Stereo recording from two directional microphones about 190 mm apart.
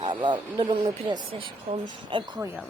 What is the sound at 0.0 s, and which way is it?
Speech, 25° right (ahead or behind).